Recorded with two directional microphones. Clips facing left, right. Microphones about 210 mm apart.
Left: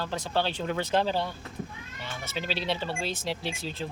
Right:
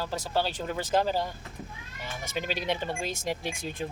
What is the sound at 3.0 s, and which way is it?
Speech, 45° right (ahead or behind).